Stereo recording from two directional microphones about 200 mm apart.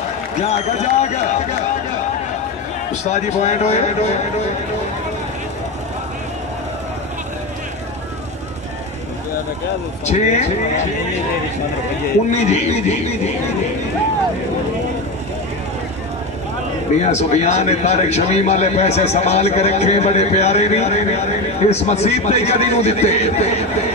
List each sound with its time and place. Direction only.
0.4 s a man's voice: 35° left (ahead or behind)
2.9 s a man's voice: 35° left (ahead or behind)
10.0 s a man's voice: 35° left (ahead or behind)
12.3 s a man's voice: 35° left (ahead or behind)
17.0 s a man's voice: 35° left (ahead or behind)